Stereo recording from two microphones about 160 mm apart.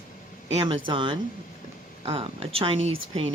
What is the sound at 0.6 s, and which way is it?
Speech, 30° right (ahead or behind).